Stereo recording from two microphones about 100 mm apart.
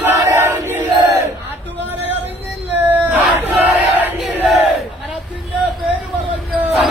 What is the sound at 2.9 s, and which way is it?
Battle cry, 15° right (ahead or behind).